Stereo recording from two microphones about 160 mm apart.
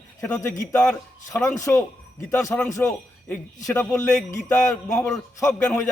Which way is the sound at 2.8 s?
5° left (ahead or behind).